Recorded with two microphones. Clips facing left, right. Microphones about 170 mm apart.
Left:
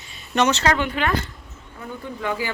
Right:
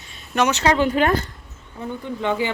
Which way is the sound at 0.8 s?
40° right (ahead or behind).